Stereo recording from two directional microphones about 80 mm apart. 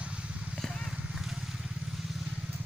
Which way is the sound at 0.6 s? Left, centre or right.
Centre.